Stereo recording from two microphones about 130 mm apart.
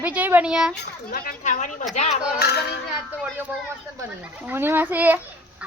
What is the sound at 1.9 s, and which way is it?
Speech, 60° left (ahead or behind).